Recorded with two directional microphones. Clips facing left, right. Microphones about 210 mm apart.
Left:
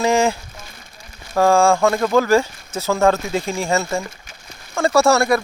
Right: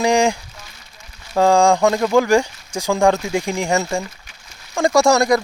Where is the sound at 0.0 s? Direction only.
15° right (ahead or behind).